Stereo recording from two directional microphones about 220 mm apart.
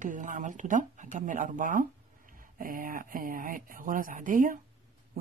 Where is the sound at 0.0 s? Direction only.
35° right (ahead or behind).